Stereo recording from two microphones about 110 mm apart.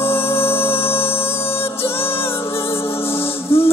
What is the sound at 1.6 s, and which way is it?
Music, 55° left (ahead or behind).